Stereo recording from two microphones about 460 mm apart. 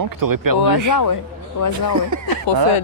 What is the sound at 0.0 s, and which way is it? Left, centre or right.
Speech, right.